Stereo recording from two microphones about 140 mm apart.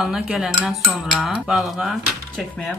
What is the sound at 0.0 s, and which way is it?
Cutlery, 5° right (ahead or behind).